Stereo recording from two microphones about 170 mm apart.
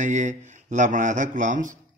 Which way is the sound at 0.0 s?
45° right (ahead or behind).